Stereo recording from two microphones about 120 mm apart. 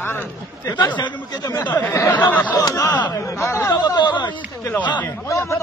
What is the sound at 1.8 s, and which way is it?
Speech, 20° left (ahead or behind).